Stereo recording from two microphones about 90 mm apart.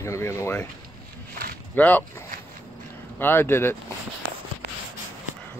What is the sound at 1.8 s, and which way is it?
Speech, 15° left (ahead or behind).